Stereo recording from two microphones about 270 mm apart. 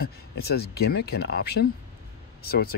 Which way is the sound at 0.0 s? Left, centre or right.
Left.